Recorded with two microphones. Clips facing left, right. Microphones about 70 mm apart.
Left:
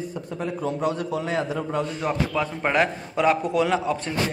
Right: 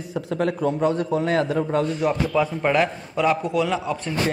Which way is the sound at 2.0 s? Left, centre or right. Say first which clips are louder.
Right 4 dB; centre.